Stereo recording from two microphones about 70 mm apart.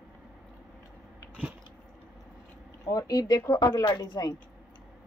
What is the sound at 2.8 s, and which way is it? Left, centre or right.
Speech, left.